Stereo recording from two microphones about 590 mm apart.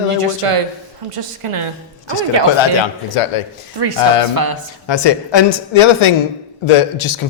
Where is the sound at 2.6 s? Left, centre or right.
Left.